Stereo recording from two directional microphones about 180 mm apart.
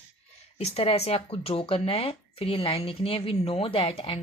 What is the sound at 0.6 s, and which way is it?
Speech, 35° left (ahead or behind).